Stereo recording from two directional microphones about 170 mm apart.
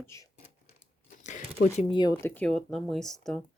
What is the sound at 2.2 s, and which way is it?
Speech, 10° left (ahead or behind).